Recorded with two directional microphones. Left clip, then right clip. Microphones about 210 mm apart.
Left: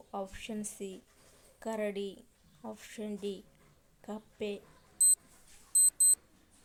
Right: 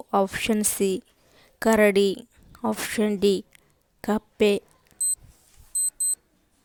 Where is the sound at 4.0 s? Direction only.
45° right (ahead or behind).